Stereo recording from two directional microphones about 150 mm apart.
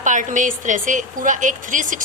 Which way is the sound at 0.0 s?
60° right (ahead or behind).